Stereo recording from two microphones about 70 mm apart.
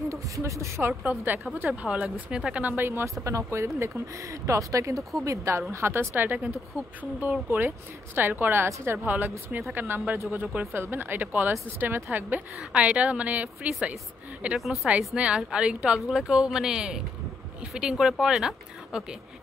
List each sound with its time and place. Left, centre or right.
0.1 s speech: right
1.0 s a woman's voice: right; by 2.6 s centre
2.6 s speech: right
3.3 s a woman's voice: right
13.7 s speech: centre
14.6 s a woman's voice: centre
15.1 s speech: centre